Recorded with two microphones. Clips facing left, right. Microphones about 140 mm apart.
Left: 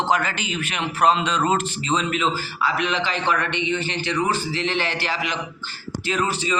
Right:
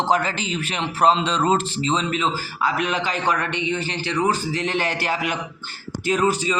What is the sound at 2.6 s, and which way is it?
A man's voice, 45° right (ahead or behind).